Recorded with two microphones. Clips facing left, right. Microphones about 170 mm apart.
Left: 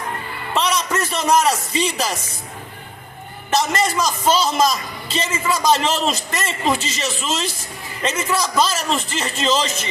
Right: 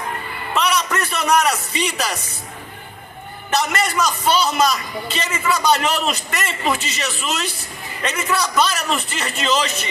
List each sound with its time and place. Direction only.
0.5 s music: 30° left (ahead or behind)
3.5 s a man's voice: 30° left (ahead or behind)